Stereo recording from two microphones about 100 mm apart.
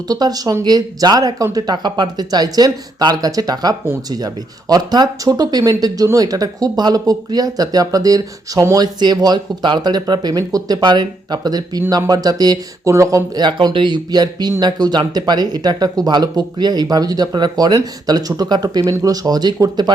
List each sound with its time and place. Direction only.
0.1 s speech: 40° right (ahead or behind)
12.9 s speech: 30° right (ahead or behind)
13.4 s speech: 50° right (ahead or behind)